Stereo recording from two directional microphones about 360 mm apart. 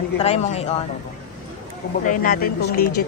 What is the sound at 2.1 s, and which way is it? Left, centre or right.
Speech, left.